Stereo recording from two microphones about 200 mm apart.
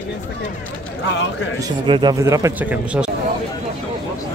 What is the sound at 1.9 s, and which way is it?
A man's voice, 20° right (ahead or behind).